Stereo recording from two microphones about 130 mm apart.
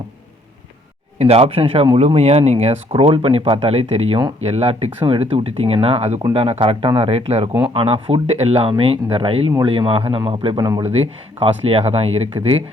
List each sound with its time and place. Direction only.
1.2 s speech: 50° right (ahead or behind)
10.8 s speech: 55° right (ahead or behind)